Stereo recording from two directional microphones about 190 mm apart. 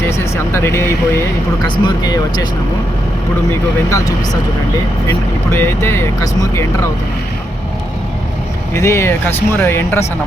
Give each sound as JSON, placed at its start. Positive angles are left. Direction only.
{"t": 0.1, "sound": "a sound", "side_deg": 15}
{"t": 1.6, "sound": "speech", "side_deg": 25}
{"t": 3.8, "sound": "speech", "side_deg": 15}
{"t": 8.7, "sound": "speech", "side_deg": 15}